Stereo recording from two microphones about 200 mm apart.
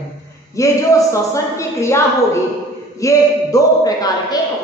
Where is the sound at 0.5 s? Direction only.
15° left (ahead or behind).